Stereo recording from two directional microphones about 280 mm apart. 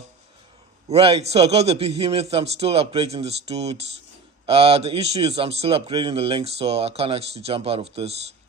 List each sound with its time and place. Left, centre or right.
0.8 s a man's voice: right